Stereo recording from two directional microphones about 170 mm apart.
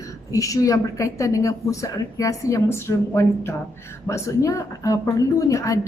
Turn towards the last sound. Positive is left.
turn(degrees=20)  # may be behind; listen again after turning